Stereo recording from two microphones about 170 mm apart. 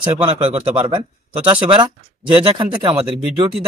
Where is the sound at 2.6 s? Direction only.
30° right (ahead or behind).